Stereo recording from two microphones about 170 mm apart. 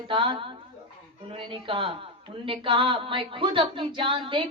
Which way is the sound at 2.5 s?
30° right (ahead or behind).